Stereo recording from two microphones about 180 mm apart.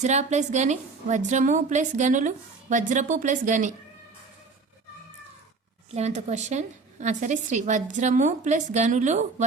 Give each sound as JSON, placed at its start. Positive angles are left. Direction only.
{"t": 0.0, "sound": "a woman's voice", "side_deg": -40}
{"t": 5.9, "sound": "a woman's voice", "side_deg": -40}